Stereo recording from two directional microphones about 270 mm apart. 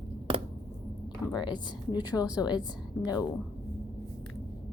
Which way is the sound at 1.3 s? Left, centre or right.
Centre.